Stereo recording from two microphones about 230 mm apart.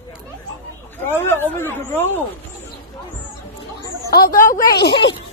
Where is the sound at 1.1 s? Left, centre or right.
Centre.